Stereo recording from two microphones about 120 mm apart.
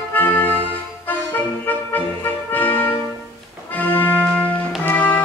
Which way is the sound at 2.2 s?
15° left (ahead or behind).